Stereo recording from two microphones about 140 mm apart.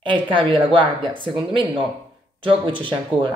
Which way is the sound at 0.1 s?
35° right (ahead or behind).